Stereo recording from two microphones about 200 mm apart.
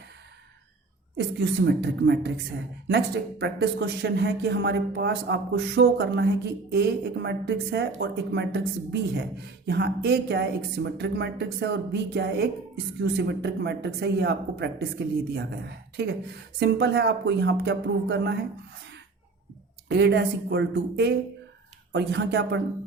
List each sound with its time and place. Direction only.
1.1 s speech: 60° right (ahead or behind)
19.9 s speech: 55° right (ahead or behind)